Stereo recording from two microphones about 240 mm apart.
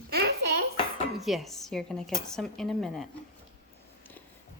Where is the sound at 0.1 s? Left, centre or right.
Right.